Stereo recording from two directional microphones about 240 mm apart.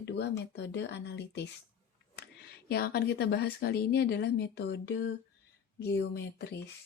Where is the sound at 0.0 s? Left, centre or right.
Left.